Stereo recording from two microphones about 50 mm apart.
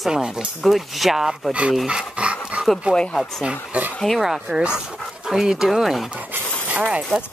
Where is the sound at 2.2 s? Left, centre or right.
Right.